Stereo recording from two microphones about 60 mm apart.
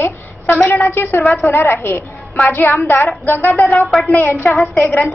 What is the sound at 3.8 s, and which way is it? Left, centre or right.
Speech, centre.